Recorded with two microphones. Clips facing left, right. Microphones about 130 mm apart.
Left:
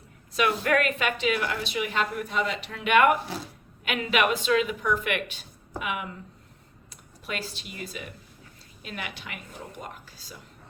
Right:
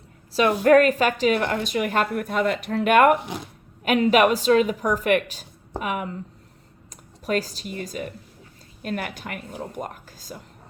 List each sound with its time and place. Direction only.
0.3 s a woman's voice: 35° right (ahead or behind)
3.2 s speech: 20° right (ahead or behind)
3.8 s a woman's voice: 40° right (ahead or behind)